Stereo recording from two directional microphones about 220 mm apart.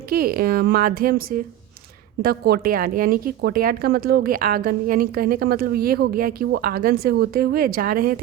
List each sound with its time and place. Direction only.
0.1 s a woman's voice: 40° right (ahead or behind)